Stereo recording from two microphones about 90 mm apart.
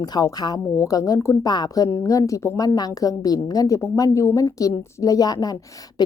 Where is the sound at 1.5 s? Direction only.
45° left (ahead or behind).